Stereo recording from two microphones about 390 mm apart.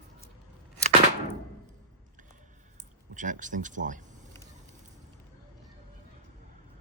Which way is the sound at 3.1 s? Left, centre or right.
Centre.